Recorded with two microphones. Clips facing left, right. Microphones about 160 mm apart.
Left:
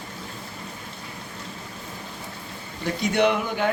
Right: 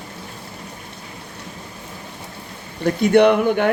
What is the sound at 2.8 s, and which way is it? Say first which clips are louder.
Speech: right 8 dB; 55° right (ahead or behind).